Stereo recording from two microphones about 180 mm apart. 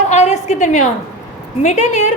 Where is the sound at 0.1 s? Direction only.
40° left (ahead or behind).